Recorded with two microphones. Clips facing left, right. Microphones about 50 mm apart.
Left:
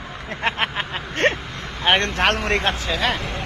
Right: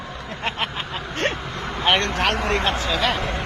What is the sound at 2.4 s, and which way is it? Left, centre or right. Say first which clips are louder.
Speech: left 1 dB; left.